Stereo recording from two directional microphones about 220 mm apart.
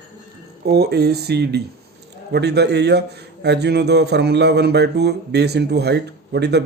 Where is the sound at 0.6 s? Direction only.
50° right (ahead or behind).